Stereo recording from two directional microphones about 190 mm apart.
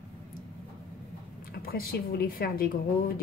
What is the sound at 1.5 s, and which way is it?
A woman's voice, 50° left (ahead or behind).